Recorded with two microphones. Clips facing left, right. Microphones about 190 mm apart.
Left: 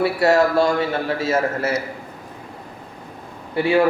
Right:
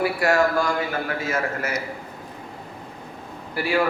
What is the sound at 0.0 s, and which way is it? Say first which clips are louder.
A man's voice: left 4 dB; 25° left (ahead or behind).